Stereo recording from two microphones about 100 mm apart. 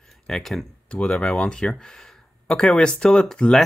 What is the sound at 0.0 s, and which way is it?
Speech, centre (ahead or behind).